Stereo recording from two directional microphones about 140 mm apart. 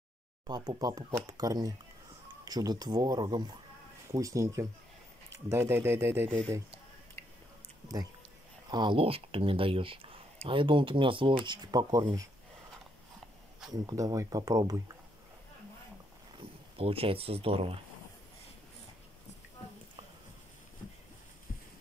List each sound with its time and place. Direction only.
0.5 s speech: 30° right (ahead or behind)
7.2 s biting: 20° left (ahead or behind)
8.6 s speech: 30° right (ahead or behind)
13.7 s speech: 25° right (ahead or behind)
16.3 s speech: 45° right (ahead or behind)